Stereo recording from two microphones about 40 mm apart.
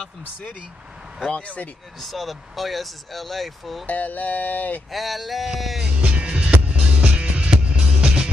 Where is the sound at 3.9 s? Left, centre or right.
Left.